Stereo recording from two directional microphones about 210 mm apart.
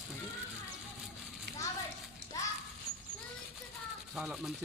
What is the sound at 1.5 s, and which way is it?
Children playing, 50° right (ahead or behind).